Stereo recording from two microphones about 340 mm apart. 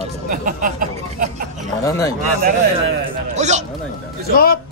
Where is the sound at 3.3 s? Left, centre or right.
Centre.